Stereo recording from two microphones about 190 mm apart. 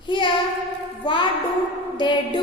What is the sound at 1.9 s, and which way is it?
Speech, 25° left (ahead or behind).